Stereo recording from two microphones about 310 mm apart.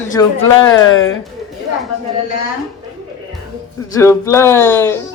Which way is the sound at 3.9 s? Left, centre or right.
Centre.